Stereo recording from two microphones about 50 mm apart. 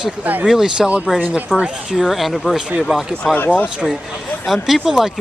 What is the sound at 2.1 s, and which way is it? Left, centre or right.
Speech, centre.